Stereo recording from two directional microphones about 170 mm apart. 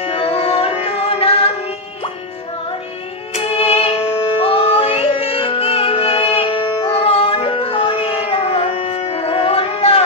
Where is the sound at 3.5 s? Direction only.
35° left (ahead or behind).